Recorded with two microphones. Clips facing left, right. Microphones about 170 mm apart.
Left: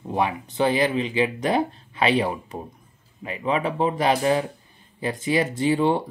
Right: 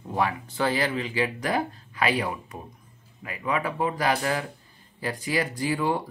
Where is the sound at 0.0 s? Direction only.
20° left (ahead or behind).